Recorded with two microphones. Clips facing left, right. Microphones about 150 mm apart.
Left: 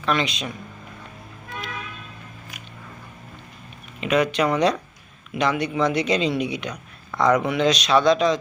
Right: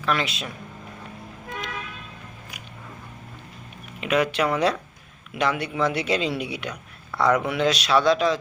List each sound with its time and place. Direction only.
0.0 s speech: 5° right (ahead or behind)
4.0 s speech: 10° right (ahead or behind)